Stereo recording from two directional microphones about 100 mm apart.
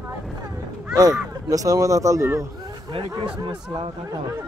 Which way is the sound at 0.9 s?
40° right (ahead or behind).